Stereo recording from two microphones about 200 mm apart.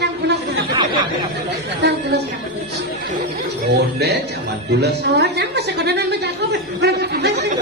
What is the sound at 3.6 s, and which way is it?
A man's voice, 55° right (ahead or behind).